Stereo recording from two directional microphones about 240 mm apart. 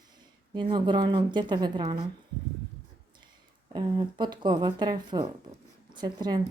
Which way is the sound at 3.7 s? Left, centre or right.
Centre.